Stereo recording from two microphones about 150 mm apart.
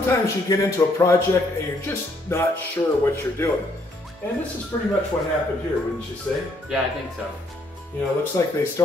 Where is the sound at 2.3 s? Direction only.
15° left (ahead or behind).